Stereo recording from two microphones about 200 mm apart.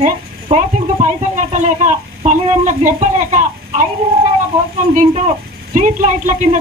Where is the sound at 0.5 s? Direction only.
30° right (ahead or behind).